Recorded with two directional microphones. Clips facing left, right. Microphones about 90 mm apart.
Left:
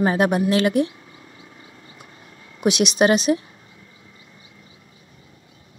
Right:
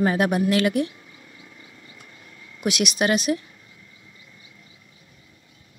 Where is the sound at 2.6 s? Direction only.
25° left (ahead or behind).